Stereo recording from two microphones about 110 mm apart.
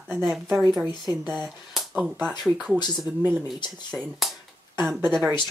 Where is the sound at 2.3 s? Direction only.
5° left (ahead or behind).